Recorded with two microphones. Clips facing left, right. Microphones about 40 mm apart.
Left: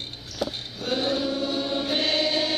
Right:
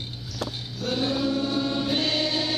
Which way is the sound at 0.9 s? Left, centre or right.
Centre.